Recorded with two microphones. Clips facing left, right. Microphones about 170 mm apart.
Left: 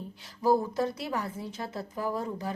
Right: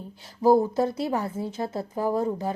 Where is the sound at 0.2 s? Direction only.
25° right (ahead or behind).